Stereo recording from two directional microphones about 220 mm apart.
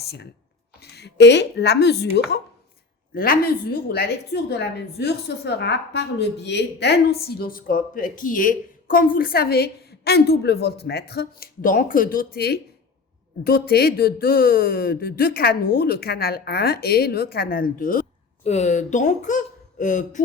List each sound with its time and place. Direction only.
0.0 s a woman's voice: 50° left (ahead or behind)